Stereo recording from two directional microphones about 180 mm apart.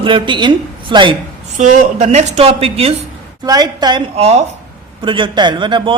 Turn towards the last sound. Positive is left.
turn(degrees=-25)  # may be behind; listen again after turning